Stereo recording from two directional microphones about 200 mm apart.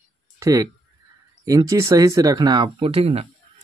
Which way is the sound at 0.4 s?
15° right (ahead or behind).